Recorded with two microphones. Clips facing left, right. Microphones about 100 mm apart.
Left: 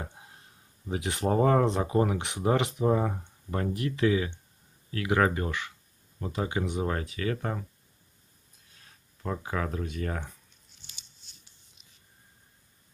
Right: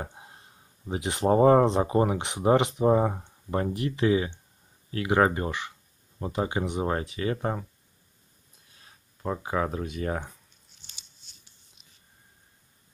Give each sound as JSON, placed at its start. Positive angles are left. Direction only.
{"t": 0.0, "sound": "a sound", "side_deg": -25}
{"t": 0.8, "sound": "speech", "side_deg": -20}
{"t": 9.2, "sound": "speech", "side_deg": -20}